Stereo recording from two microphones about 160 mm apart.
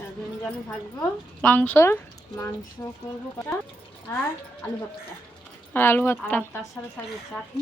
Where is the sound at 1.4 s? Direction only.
10° left (ahead or behind).